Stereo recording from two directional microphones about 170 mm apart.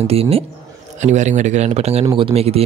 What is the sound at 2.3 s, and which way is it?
Speech, 35° right (ahead or behind).